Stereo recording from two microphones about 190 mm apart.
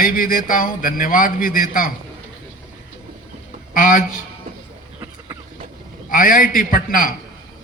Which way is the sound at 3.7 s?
45° left (ahead or behind).